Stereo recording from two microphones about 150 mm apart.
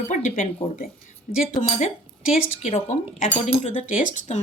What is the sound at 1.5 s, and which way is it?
Speech, 50° left (ahead or behind).